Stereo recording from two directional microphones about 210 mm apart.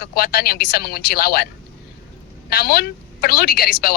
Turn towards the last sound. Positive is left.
turn(degrees=45)  # may be behind; listen again after turning